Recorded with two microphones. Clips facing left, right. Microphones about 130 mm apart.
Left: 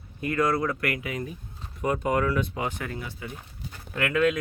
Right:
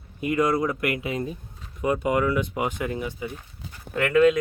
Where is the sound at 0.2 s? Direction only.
15° right (ahead or behind).